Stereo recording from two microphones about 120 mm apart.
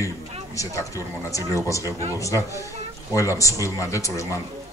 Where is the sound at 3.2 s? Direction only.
25° left (ahead or behind).